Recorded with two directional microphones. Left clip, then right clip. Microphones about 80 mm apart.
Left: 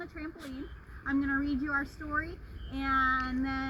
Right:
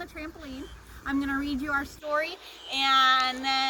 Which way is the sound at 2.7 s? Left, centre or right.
Right.